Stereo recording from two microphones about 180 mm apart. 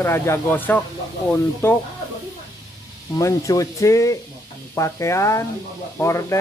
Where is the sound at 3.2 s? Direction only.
15° left (ahead or behind).